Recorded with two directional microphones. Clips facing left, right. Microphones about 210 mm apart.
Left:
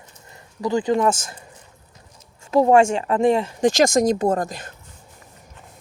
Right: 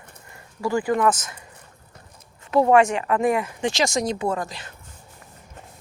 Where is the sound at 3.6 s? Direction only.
50° left (ahead or behind).